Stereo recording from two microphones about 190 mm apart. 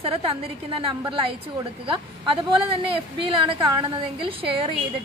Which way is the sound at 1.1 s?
25° right (ahead or behind).